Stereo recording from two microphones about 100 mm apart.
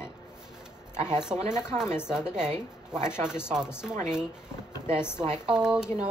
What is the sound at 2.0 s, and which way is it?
Speech, 5° right (ahead or behind).